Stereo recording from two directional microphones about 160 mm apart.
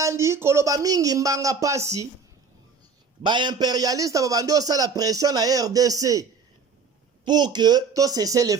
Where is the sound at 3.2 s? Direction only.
30° right (ahead or behind).